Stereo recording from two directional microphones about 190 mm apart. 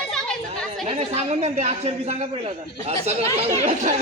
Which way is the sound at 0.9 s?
30° right (ahead or behind).